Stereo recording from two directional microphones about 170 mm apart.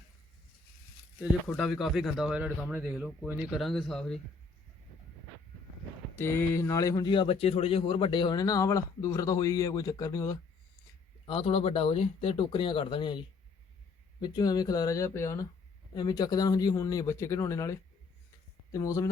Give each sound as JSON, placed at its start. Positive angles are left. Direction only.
{"t": 1.5, "sound": "speech", "side_deg": 0}
{"t": 6.1, "sound": "speech", "side_deg": 15}
{"t": 11.3, "sound": "speech", "side_deg": 35}